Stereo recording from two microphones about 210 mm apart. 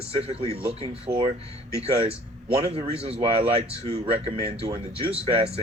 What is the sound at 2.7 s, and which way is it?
Speech, 30° right (ahead or behind).